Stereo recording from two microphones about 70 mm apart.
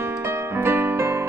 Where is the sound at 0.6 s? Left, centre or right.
Right.